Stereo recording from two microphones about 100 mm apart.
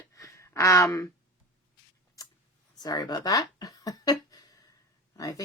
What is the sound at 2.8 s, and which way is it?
Speech, 40° left (ahead or behind).